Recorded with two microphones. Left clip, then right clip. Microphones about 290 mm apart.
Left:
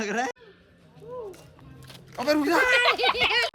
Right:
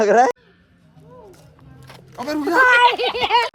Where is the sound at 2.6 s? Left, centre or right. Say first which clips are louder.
Right 11 dB; centre.